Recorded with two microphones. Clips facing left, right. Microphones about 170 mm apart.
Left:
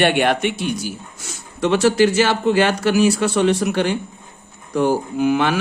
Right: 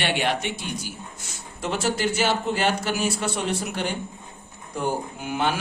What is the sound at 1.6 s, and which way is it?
Speech, 85° left.